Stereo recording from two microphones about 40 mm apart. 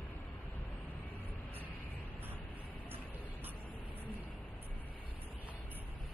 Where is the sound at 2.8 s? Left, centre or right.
Right.